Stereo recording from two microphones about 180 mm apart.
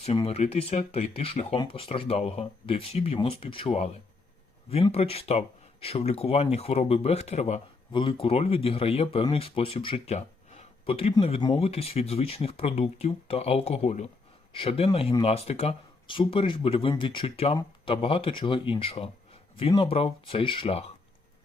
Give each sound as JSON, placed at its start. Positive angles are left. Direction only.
{"t": 0.0, "sound": "speech", "side_deg": 35}